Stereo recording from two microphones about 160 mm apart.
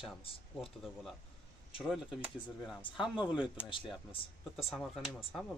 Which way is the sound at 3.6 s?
30° left (ahead or behind).